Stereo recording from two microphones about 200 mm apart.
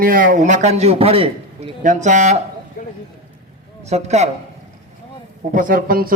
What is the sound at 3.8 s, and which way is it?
Speech, 35° right (ahead or behind).